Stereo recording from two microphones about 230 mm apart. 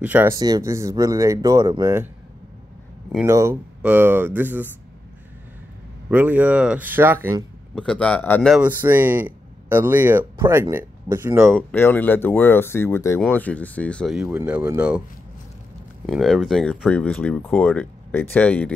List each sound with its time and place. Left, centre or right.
0.0 s speech: centre
3.3 s speech: centre
6.0 s speech: centre
7.7 s speech: centre
11.5 s speech: centre
16.1 s speech: centre